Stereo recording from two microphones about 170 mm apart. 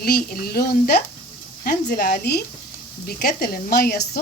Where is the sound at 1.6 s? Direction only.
55° left (ahead or behind); by 4.1 s 70° left (ahead or behind).